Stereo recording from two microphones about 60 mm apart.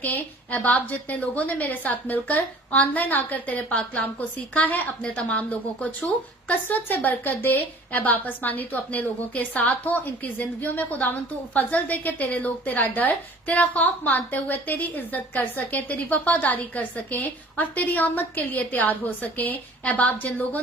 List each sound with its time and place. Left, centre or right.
0.0 s a woman's voice: left